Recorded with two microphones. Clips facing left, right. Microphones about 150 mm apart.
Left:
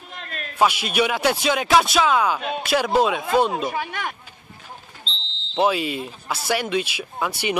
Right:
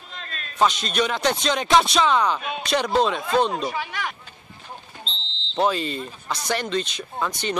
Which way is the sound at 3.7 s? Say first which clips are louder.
Left 2 dB; 50° left (ahead or behind).